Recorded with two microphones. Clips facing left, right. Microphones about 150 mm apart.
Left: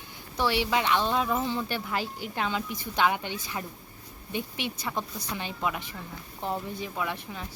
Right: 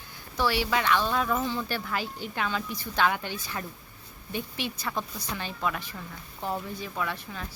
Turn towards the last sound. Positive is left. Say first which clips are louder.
# even
turn(degrees=20)  # may be behind; listen again after turning